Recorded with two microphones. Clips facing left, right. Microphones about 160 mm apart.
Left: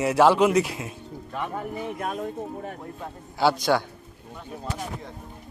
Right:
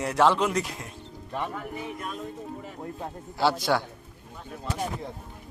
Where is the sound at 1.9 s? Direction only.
55° left (ahead or behind).